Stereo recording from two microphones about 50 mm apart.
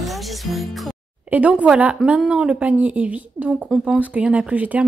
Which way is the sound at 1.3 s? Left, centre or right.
Right.